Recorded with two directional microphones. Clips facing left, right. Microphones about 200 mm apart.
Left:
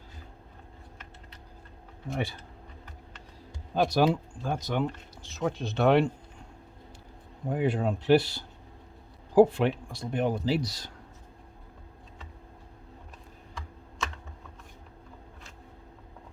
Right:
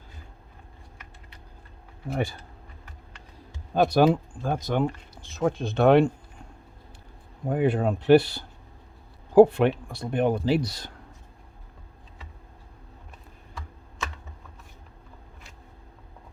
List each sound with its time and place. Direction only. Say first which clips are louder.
3.8 s speech: right 4 dB; 55° right (ahead or behind)
7.4 s speech: right 4 dB; 55° right (ahead or behind)